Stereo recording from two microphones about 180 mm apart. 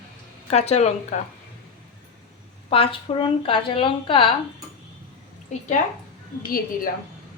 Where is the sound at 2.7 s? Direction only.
30° left (ahead or behind).